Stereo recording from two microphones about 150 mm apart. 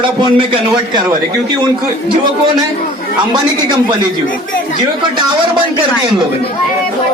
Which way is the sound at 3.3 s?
30° right (ahead or behind).